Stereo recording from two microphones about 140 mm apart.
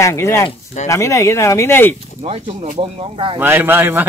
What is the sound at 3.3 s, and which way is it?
Speech, 15° right (ahead or behind).